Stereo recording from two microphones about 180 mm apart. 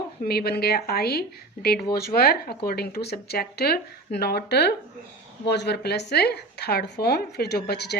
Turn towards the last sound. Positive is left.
turn(degrees=65)  # may be behind; listen again after turning